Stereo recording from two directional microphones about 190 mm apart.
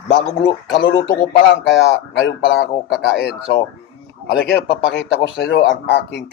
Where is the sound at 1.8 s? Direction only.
60° left (ahead or behind).